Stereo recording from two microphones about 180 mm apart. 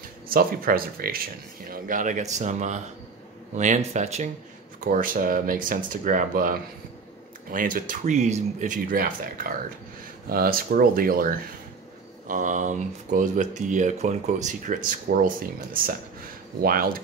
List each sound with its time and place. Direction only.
0.3 s speech: 55° right (ahead or behind); by 4.3 s 40° right (ahead or behind)
4.7 s speech: 50° right (ahead or behind)